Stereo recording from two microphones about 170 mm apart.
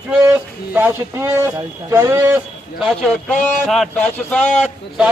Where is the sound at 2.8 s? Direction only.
Centre (ahead or behind).